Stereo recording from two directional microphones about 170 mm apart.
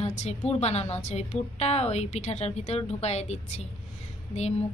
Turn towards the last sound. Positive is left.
turn(degrees=40)  # may be behind; listen again after turning